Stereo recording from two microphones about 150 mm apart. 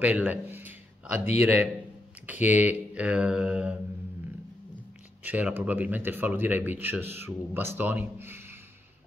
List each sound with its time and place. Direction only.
0.0 s a sound: 10° right (ahead or behind)
1.4 s speech: 10° right (ahead or behind)
5.2 s speech: 10° right (ahead or behind)